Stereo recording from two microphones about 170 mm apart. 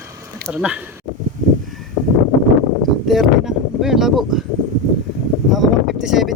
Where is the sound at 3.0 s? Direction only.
Centre (ahead or behind).